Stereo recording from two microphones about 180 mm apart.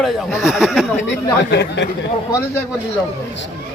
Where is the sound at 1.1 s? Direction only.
70° left (ahead or behind).